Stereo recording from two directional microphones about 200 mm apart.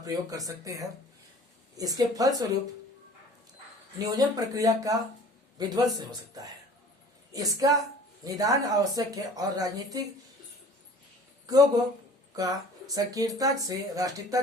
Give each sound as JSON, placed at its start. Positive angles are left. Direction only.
{"t": 0.0, "sound": "speech", "side_deg": -15}
{"t": 3.9, "sound": "speech", "side_deg": -15}
{"t": 12.4, "sound": "speech", "side_deg": -20}